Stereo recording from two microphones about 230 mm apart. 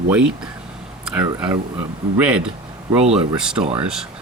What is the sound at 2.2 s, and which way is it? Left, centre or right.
Speech, centre.